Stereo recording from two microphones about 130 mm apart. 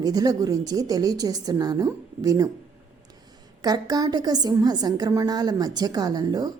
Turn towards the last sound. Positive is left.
turn(degrees=-30)  # may be behind; listen again after turning